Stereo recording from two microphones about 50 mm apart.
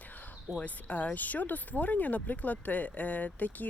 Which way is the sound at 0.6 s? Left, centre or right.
Left.